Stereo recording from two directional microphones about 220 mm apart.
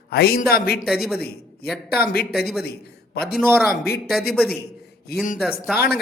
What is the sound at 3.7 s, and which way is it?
Speech, 45° left (ahead or behind).